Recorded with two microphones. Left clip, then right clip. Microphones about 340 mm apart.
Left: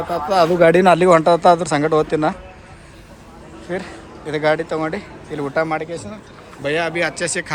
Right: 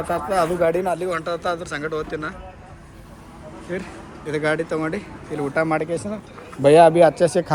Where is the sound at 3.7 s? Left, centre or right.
Centre.